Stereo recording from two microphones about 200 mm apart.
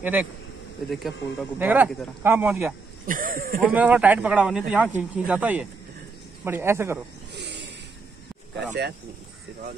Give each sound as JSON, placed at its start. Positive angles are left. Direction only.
{"t": 0.8, "sound": "speech", "side_deg": 0}
{"t": 3.1, "sound": "speech", "side_deg": -45}
{"t": 3.6, "sound": "speech", "side_deg": -5}
{"t": 7.3, "sound": "a sound", "side_deg": -60}
{"t": 8.5, "sound": "speech", "side_deg": -55}